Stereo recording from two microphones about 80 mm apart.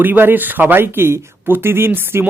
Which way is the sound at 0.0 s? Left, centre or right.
Right.